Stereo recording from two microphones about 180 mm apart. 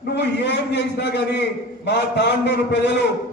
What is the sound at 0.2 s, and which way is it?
A man's voice, 70° left (ahead or behind).